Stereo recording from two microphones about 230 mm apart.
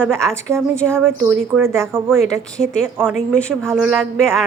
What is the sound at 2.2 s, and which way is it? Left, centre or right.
Speech, centre.